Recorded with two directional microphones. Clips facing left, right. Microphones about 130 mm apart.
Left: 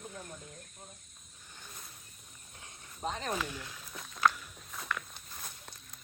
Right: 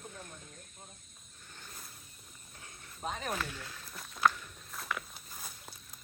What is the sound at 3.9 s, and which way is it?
Walk, 5° right (ahead or behind).